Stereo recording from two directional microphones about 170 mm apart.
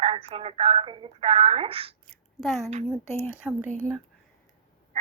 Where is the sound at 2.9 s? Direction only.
15° left (ahead or behind).